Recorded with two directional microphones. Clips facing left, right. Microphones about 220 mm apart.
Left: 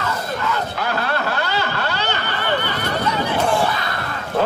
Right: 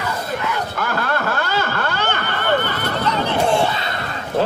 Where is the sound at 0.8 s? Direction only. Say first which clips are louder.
Even; 50° right (ahead or behind).